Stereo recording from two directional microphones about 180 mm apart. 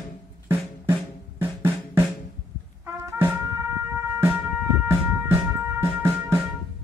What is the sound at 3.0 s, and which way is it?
Music, 15° right (ahead or behind).